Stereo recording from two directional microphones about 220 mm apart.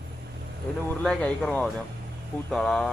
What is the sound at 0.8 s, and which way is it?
Speech, 5° left (ahead or behind).